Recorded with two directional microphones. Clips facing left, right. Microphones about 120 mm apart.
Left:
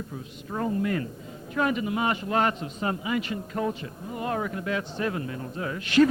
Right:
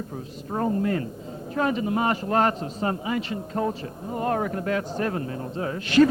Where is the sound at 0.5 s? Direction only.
40° right (ahead or behind).